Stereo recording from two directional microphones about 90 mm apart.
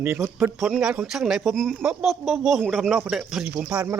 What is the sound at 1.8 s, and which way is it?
Speech, 10° right (ahead or behind).